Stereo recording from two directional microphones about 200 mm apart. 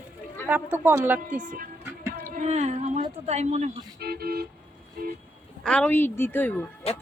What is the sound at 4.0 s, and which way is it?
Speech, 50° right (ahead or behind).